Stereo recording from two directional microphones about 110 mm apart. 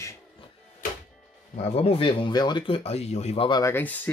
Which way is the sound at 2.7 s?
70° left (ahead or behind).